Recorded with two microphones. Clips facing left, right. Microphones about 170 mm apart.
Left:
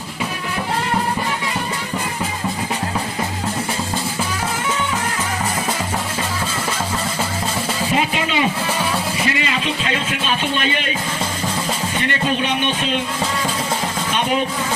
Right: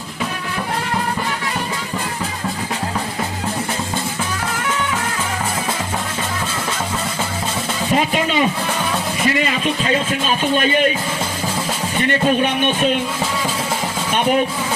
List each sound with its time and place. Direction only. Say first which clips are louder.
7.9 s a sound: right 4 dB; 45° right (ahead or behind)
9.4 s a man's voice: right 3 dB; 45° right (ahead or behind)
12.4 s a man's voice: right 4 dB; 50° right (ahead or behind)